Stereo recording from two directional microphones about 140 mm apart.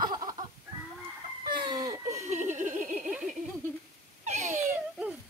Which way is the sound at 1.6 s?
30° right (ahead or behind).